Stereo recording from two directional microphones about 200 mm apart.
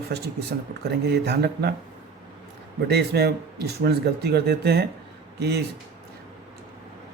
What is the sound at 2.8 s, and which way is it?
Speech, 55° right (ahead or behind).